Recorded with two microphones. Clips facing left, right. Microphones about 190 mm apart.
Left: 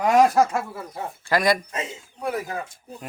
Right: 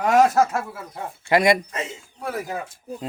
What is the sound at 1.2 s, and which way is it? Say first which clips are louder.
Speech: right 3 dB; 25° right (ahead or behind).